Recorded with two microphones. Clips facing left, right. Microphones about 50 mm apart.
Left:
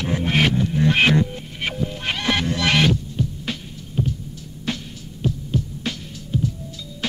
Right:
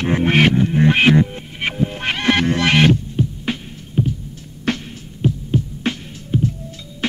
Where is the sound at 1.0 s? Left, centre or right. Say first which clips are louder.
Right 4 dB; right.